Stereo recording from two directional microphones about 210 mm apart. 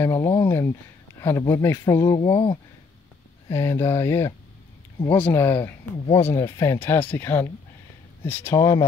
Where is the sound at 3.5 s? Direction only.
10° left (ahead or behind).